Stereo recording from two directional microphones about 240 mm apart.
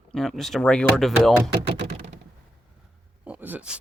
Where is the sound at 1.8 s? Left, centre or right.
Right.